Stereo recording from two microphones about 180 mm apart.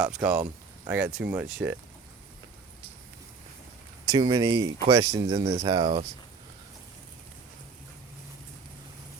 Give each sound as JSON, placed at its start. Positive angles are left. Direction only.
{"t": 0.0, "sound": "speech", "side_deg": -10}
{"t": 4.0, "sound": "speech", "side_deg": -25}